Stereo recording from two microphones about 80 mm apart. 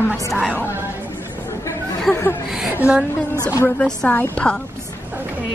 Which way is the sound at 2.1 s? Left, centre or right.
Left.